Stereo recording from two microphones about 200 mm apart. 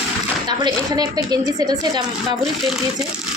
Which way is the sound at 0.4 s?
20° right (ahead or behind).